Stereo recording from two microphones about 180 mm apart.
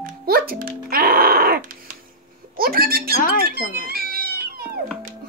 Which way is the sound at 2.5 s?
55° right (ahead or behind).